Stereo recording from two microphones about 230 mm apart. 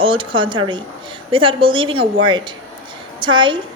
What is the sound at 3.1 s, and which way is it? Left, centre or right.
Speech, right.